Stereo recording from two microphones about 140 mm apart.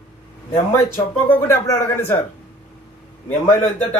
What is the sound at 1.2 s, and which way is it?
Speech, 20° left (ahead or behind).